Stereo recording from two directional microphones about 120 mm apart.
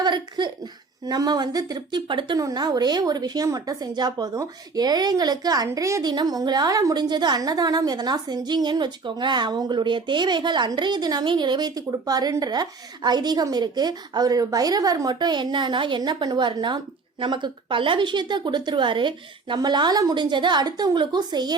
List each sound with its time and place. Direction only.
0.0 s speech: 40° right (ahead or behind)